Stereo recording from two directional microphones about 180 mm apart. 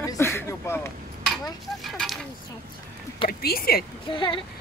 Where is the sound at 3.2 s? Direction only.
55° left (ahead or behind).